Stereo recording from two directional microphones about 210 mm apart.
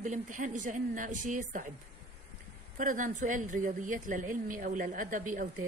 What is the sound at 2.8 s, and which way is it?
Speech, 40° right (ahead or behind).